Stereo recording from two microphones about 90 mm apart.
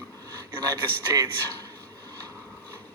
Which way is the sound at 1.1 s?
40° right (ahead or behind).